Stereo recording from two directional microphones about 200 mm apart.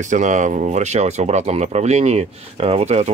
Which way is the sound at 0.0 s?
40° right (ahead or behind).